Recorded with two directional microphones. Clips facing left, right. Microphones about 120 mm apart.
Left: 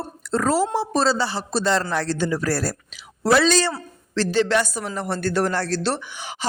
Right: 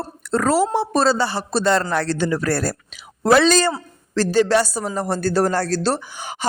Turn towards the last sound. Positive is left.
turn(degrees=-45)  # may be behind; listen again after turning